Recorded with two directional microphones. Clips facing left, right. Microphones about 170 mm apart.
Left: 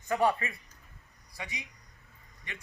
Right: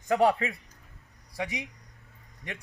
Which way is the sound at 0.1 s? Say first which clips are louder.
Right 4 dB; 80° right.